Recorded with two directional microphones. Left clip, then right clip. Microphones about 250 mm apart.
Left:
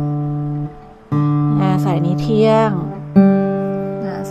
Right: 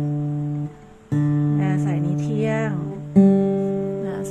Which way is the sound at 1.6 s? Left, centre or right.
Left.